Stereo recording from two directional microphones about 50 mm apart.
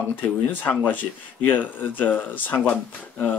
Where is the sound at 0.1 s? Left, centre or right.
Left.